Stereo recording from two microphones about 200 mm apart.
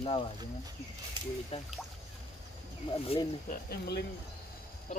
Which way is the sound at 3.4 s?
55° left (ahead or behind).